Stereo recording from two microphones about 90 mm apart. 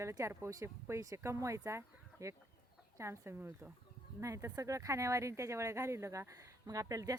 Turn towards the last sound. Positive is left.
turn(degrees=-40)  # may be behind; listen again after turning